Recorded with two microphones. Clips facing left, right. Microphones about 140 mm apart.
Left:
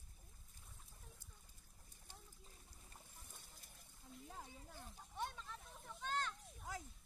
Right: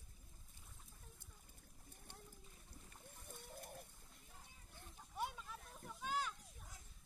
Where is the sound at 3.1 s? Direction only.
60° right (ahead or behind).